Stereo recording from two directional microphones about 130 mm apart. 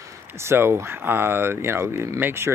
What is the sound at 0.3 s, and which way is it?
Speech, 20° right (ahead or behind).